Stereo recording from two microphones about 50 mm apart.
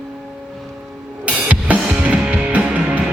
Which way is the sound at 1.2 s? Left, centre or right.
Right.